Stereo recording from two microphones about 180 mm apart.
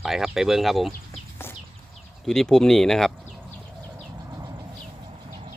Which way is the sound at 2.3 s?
Centre (ahead or behind).